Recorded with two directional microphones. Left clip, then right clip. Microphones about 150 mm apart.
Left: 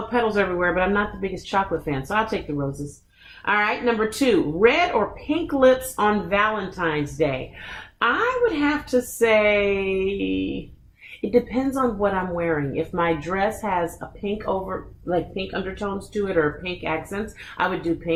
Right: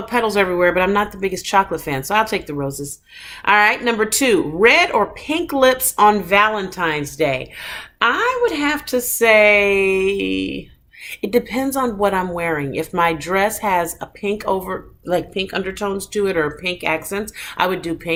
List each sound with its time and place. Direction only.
0.1 s a woman's voice: 20° right (ahead or behind)